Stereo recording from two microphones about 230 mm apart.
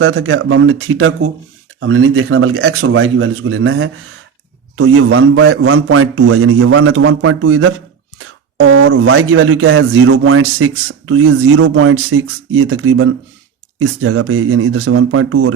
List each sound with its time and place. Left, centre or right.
0.0 s a man's voice: right